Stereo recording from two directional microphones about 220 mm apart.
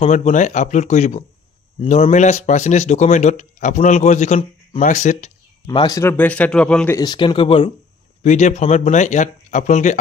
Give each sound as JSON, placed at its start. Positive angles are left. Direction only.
{"t": 0.0, "sound": "speech", "side_deg": 35}
{"t": 5.7, "sound": "a man's voice", "side_deg": 15}
{"t": 7.0, "sound": "speech", "side_deg": 20}